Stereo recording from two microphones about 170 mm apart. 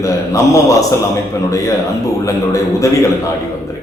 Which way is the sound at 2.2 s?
20° left (ahead or behind).